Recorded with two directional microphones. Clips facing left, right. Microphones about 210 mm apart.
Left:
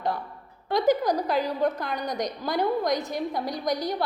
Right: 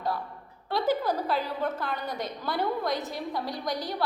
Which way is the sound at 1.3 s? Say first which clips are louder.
Left 4 dB; 40° left (ahead or behind).